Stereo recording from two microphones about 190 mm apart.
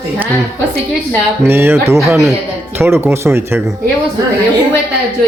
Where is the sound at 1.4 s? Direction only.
10° right (ahead or behind).